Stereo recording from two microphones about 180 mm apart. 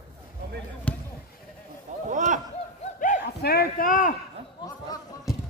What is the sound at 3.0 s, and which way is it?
Speech, 55° left (ahead or behind).